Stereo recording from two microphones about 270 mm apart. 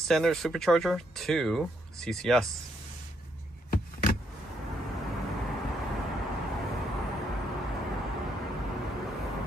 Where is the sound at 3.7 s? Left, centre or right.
Left.